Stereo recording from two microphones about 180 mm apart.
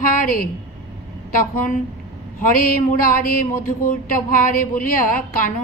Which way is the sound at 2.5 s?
50° left (ahead or behind).